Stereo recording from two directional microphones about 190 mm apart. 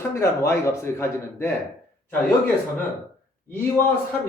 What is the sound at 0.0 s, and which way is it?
Speech, 15° left (ahead or behind).